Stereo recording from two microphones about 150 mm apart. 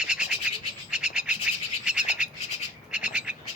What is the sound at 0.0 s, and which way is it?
Bird, 5° right (ahead or behind).